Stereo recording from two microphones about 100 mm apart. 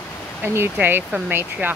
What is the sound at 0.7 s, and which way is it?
Speech, 20° right (ahead or behind).